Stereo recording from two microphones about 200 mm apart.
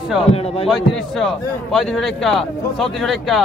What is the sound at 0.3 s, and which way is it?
Speech, 30° left (ahead or behind).